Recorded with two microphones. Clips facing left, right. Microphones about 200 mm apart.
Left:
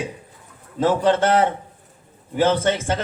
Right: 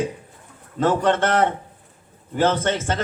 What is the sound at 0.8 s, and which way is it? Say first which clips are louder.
A man's voice: left 1 dB; 10° left (ahead or behind).